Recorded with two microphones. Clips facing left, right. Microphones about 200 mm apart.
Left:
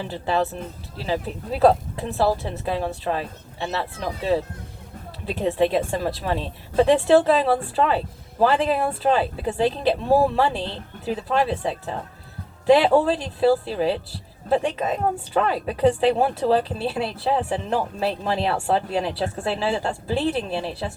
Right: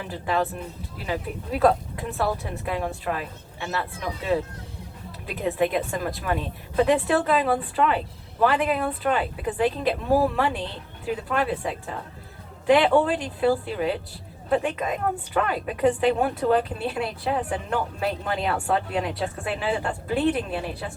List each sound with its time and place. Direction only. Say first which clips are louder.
0.0 s speech: left 2 dB; 30° left (ahead or behind)